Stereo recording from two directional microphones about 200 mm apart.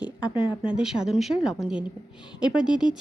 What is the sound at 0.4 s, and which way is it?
Speech, 5° right (ahead or behind).